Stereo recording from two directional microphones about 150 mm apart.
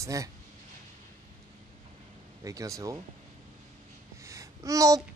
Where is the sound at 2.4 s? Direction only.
20° right (ahead or behind).